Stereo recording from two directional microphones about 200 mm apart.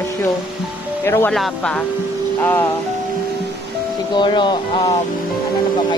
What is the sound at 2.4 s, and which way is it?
Music, 10° left (ahead or behind).